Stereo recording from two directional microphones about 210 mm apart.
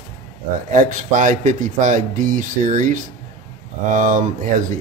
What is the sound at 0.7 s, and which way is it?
Speech, 40° right (ahead or behind).